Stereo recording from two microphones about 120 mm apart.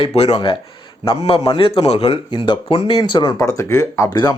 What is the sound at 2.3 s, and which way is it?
Speech, 45° left (ahead or behind).